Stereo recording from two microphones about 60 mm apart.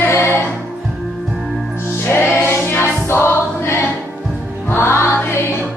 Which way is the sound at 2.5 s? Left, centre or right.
Left.